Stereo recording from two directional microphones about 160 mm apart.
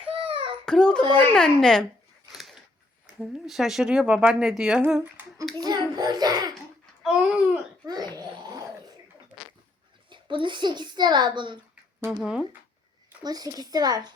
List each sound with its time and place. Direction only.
0.0 s a sound: 35° right (ahead or behind)
0.6 s a child's voice: 5° left (ahead or behind)
2.3 s a sound: centre (ahead or behind)
3.1 s speech: centre (ahead or behind)
5.5 s a child's voice: 25° right (ahead or behind)
7.0 s speech: 5° right (ahead or behind)
7.9 s babbling: 25° right (ahead or behind)
10.1 s a child's voice: 30° right (ahead or behind)
12.2 s speech: 5° right (ahead or behind)
13.2 s a child's voice: 25° right (ahead or behind)